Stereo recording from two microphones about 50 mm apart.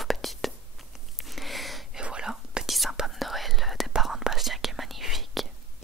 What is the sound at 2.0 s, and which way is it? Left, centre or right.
Whispering, centre.